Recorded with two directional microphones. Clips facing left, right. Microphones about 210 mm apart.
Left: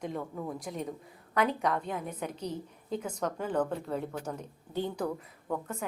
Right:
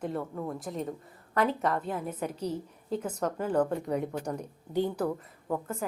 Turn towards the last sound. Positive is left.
turn(degrees=-5)  # may be behind; listen again after turning